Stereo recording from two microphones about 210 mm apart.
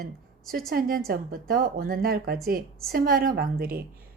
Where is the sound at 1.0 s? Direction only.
45° right (ahead or behind).